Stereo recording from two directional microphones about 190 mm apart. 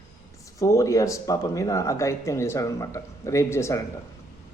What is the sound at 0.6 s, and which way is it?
Speech, 15° left (ahead or behind).